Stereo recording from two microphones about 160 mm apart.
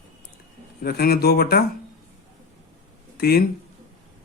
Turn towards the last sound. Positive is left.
turn(degrees=75)  # may be behind; listen again after turning